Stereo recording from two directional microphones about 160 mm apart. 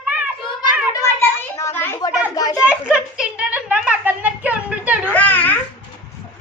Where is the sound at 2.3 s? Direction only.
25° left (ahead or behind).